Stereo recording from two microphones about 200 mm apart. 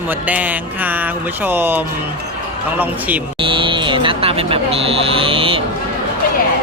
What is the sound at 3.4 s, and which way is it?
Speech, 25° right (ahead or behind).